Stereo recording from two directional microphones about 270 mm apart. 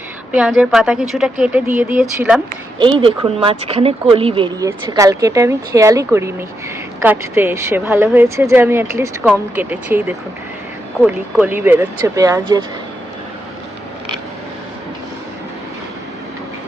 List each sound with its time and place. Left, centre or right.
0.3 s speech: centre
2.7 s speech: centre